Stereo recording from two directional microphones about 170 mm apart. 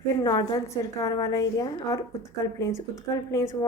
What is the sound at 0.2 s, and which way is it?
A woman's voice, 25° left (ahead or behind).